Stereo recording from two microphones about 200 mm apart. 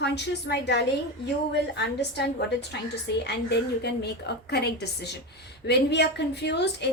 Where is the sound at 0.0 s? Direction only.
60° left (ahead or behind).